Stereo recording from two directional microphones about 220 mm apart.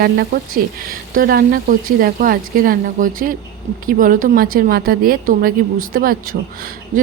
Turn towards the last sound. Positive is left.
turn(degrees=-40)  # may be behind; listen again after turning